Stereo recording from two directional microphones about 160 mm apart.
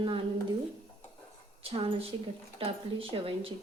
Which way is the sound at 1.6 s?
35° right (ahead or behind).